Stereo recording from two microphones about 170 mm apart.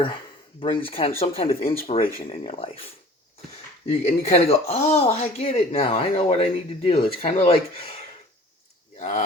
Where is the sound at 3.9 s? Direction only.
40° left (ahead or behind).